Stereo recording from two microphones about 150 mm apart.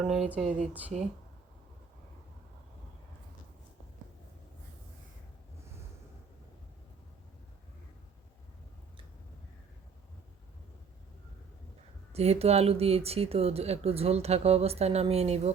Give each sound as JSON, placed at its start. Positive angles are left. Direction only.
{"t": 0.0, "sound": "speech", "side_deg": -5}
{"t": 12.1, "sound": "speech", "side_deg": -45}